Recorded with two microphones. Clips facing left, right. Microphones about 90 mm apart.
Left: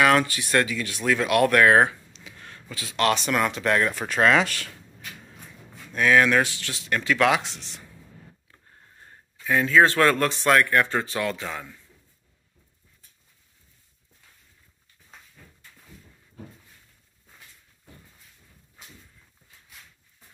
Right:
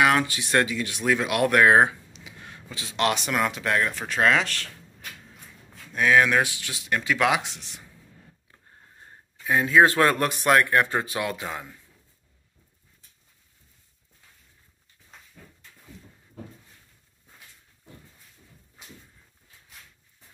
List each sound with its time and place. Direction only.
0.0 s speech: 15° right (ahead or behind); by 4.6 s 5° left (ahead or behind)
5.9 s speech: 10° right (ahead or behind)
9.0 s speech: 20° right (ahead or behind)